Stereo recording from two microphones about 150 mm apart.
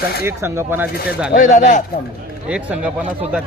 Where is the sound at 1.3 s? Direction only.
60° left (ahead or behind).